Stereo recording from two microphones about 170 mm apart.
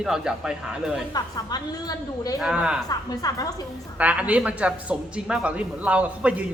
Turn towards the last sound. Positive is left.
turn(degrees=-10)  # may be behind; listen again after turning